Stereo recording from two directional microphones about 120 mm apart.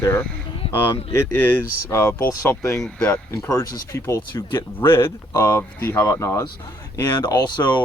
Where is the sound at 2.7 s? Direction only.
5° left (ahead or behind).